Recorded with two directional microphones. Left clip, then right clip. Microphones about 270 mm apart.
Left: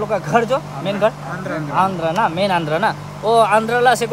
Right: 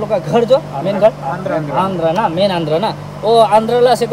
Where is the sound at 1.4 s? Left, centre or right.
Centre.